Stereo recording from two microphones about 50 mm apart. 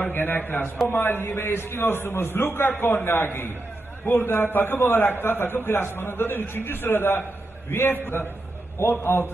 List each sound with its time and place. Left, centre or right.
0.0 s a man's voice: left